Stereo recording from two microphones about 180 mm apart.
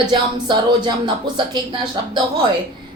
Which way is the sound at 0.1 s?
25° right (ahead or behind).